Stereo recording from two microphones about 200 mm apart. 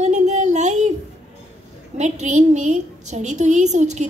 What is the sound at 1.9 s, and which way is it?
Female singing, 35° right (ahead or behind).